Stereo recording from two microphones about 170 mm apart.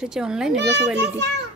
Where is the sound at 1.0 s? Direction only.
80° right.